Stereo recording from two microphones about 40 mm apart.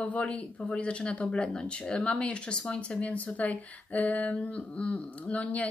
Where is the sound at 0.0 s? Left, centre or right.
Left.